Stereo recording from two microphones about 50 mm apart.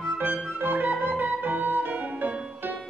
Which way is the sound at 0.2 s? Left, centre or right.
Right.